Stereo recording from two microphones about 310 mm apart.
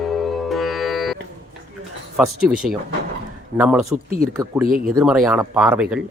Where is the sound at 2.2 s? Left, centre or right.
Centre.